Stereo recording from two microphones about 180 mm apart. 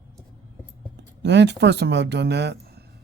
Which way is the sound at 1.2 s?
75° right (ahead or behind).